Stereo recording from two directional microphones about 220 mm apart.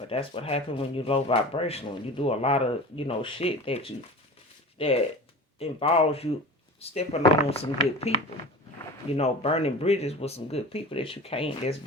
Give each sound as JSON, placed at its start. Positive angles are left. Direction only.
{"t": 0.1, "sound": "speech", "side_deg": 25}